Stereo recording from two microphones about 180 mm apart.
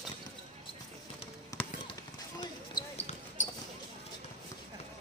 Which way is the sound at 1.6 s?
10° left (ahead or behind).